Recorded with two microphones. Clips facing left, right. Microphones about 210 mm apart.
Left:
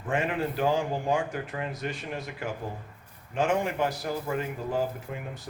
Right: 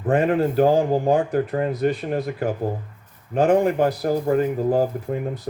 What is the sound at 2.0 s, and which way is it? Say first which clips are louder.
Speech: right 11 dB; 55° right (ahead or behind).